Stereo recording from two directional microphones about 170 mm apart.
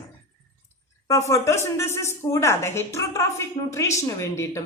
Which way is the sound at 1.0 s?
20° left (ahead or behind).